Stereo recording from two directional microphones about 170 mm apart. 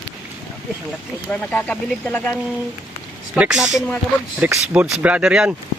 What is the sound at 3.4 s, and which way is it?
Speech, 5° right (ahead or behind).